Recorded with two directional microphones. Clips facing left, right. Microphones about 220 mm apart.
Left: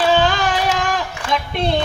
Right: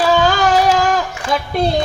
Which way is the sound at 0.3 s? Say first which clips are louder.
Right 5 dB; 35° right (ahead or behind).